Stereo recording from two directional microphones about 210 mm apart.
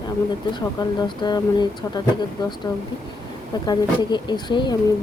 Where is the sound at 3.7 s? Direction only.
20° left (ahead or behind).